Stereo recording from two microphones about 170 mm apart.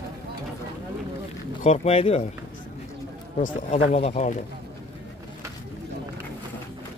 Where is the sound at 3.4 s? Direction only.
40° left (ahead or behind).